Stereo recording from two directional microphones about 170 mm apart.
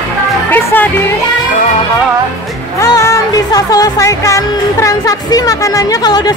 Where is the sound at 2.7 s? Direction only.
20° left (ahead or behind).